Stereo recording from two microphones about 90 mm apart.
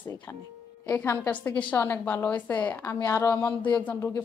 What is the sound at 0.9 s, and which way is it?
A woman's voice, 25° left (ahead or behind).